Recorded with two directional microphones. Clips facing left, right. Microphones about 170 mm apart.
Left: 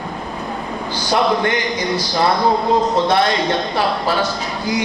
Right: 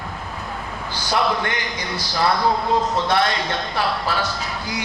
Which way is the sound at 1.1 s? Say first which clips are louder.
Left 5 dB; 20° left (ahead or behind).